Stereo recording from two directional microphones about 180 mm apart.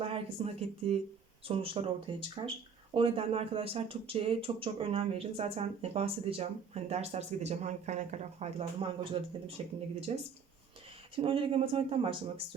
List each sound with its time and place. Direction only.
0.0 s speech: 30° right (ahead or behind)